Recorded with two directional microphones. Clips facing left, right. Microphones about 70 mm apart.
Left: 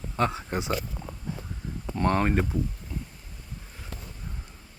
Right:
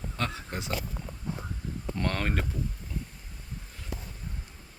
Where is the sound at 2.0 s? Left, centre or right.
Centre.